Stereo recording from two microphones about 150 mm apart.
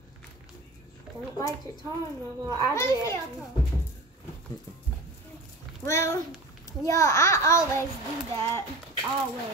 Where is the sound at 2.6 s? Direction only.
20° left (ahead or behind).